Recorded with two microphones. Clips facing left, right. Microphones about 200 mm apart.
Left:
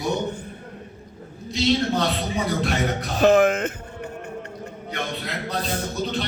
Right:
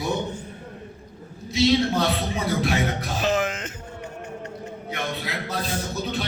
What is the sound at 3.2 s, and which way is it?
Speech, 60° left (ahead or behind).